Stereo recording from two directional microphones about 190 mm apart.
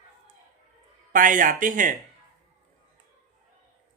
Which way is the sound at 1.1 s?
45° right (ahead or behind).